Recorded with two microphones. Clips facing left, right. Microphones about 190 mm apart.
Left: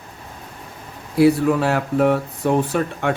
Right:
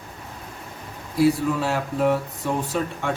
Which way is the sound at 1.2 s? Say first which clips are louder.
Left 5 dB; 65° left (ahead or behind).